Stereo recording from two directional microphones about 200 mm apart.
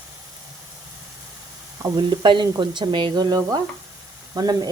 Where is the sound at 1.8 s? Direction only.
20° right (ahead or behind).